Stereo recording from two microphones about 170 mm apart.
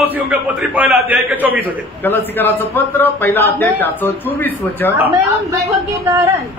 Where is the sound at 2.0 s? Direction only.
10° left (ahead or behind).